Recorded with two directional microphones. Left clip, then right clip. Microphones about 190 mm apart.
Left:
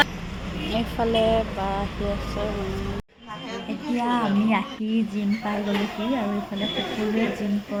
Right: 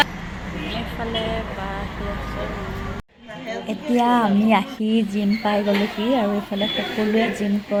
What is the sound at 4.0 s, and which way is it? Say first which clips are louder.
Speech: right 5 dB; 25° right (ahead or behind).